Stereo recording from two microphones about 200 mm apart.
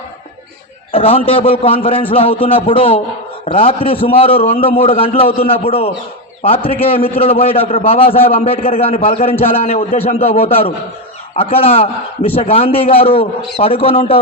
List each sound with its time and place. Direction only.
0.9 s a man's voice: 30° left (ahead or behind)